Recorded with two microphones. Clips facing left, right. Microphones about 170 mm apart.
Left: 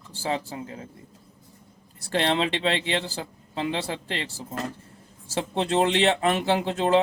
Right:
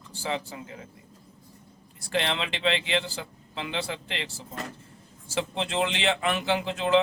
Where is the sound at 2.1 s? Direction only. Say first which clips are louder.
Left 5 dB; 35° left (ahead or behind).